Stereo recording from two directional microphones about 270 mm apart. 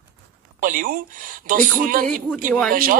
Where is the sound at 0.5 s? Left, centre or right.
Right.